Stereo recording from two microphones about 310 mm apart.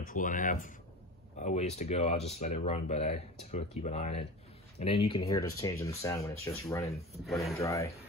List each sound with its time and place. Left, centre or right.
0.0 s speech: left; by 7.9 s centre